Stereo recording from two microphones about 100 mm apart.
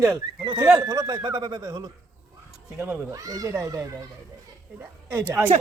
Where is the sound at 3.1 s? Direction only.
35° right (ahead or behind).